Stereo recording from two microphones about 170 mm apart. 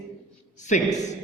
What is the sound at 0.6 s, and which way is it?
Speech, 45° left (ahead or behind).